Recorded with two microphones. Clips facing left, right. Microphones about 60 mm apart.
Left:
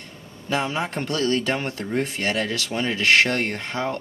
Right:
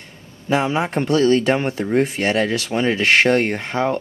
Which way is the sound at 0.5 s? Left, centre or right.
Centre.